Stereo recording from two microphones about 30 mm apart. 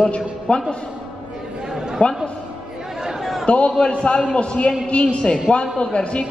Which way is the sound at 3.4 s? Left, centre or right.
Left.